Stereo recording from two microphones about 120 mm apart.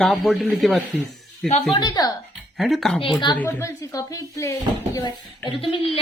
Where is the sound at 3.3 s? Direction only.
20° left (ahead or behind).